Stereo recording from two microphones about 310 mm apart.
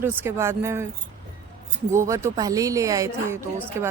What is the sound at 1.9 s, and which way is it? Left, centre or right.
Speech, centre.